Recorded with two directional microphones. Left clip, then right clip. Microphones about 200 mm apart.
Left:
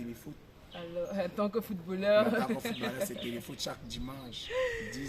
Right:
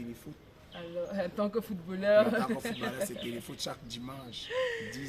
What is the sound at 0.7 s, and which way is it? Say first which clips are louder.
A man's voice: even; 10° left (ahead or behind).